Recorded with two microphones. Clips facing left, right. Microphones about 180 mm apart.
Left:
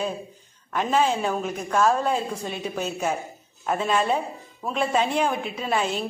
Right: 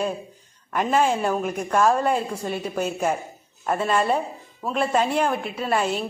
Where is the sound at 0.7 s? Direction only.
5° right (ahead or behind).